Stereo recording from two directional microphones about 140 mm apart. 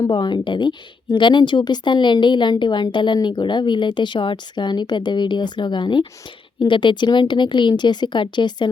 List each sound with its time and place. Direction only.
0.1 s speech: 35° left (ahead or behind)